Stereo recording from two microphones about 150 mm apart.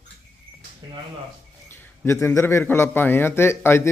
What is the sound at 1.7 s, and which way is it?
A man's voice, 15° left (ahead or behind).